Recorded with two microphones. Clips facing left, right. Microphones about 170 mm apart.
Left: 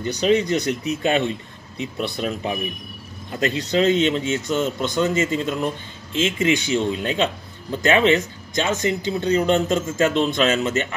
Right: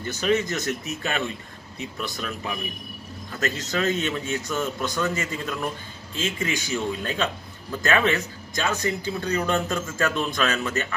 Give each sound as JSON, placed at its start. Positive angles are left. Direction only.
{"t": 0.0, "sound": "speech", "side_deg": -50}
{"t": 2.1, "sound": "a man's voice", "side_deg": 30}
{"t": 3.3, "sound": "speech", "side_deg": -45}
{"t": 3.7, "sound": "a man's voice", "side_deg": 20}